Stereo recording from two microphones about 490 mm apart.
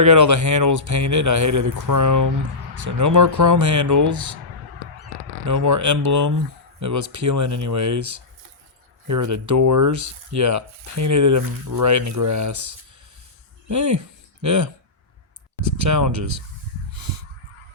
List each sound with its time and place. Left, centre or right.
0.0 s a man's voice: right
5.5 s a man's voice: right
16.9 s honk: right